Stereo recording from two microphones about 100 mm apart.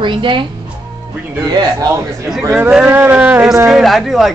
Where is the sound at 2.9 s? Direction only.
15° right (ahead or behind); by 4.3 s centre (ahead or behind).